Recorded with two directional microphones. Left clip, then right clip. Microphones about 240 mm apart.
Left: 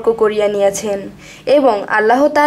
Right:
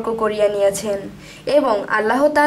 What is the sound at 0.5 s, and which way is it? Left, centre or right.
Speech, centre.